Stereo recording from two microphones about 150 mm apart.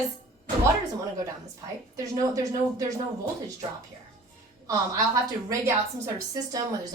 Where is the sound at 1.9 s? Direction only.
20° right (ahead or behind).